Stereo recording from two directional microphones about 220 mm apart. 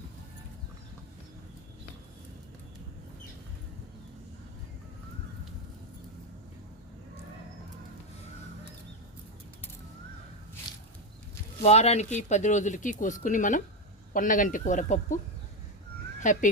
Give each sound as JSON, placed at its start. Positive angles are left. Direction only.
{"t": 11.6, "sound": "speech", "side_deg": 30}
{"t": 16.2, "sound": "speech", "side_deg": 35}